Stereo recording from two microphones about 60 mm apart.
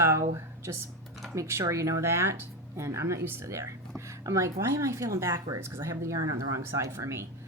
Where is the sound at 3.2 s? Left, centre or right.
Right.